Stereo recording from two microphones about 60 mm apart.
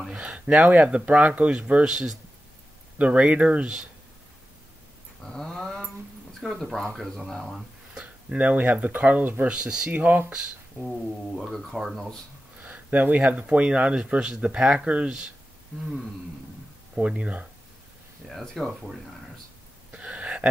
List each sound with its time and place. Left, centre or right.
0.1 s speech: centre
1.9 s speech: centre
3.0 s speech: centre
5.2 s dog: centre
6.6 s speech: centre
8.0 s speech: right
10.8 s speech: centre
12.5 s speech: right
16.9 s speech: centre
18.2 s speech: centre
20.0 s a sound: centre